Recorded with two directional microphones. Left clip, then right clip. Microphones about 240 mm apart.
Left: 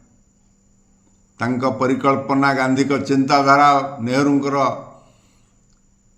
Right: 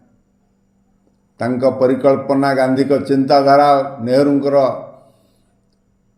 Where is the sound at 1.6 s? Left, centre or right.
Centre.